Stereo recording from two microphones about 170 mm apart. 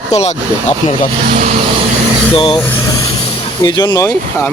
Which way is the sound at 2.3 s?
30° left (ahead or behind).